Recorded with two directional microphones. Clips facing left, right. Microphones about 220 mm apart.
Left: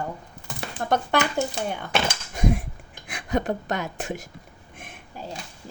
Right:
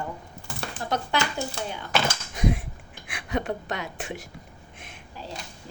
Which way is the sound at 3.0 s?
40° left (ahead or behind).